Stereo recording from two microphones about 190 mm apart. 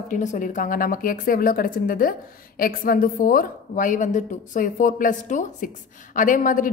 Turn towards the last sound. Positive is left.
turn(degrees=45)  # may be behind; listen again after turning